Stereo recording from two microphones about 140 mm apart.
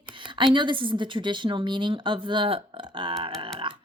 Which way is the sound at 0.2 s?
35° right (ahead or behind).